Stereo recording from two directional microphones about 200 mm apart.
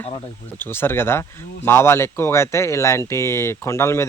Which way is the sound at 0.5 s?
10° left (ahead or behind).